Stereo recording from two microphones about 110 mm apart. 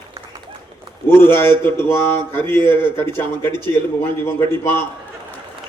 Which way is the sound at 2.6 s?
20° left (ahead or behind).